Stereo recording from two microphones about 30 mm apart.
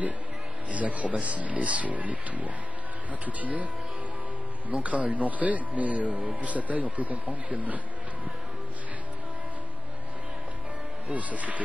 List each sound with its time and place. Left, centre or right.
0.7 s speech: right
4.6 s speech: right
11.1 s speech: right